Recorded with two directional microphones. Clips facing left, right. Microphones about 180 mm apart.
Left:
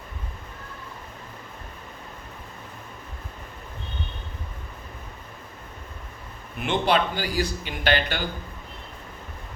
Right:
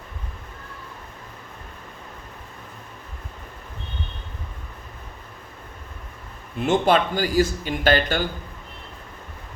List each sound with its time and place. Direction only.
6.7 s a man's voice: 45° right (ahead or behind)